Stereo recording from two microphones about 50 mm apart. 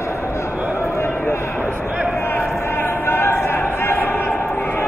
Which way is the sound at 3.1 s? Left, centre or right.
Left.